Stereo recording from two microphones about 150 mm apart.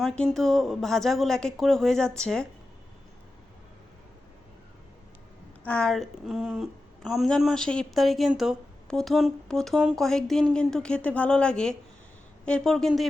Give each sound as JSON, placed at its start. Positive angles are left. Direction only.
{"t": 0.0, "sound": "a woman's voice", "side_deg": 0}
{"t": 5.6, "sound": "a woman's voice", "side_deg": 5}